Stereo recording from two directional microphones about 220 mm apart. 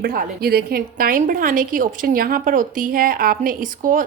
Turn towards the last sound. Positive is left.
turn(degrees=-40)  # may be behind; listen again after turning